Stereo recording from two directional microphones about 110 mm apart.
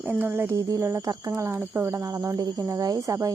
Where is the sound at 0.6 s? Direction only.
30° right (ahead or behind).